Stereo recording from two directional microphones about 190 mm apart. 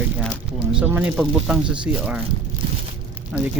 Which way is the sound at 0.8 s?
5° right (ahead or behind).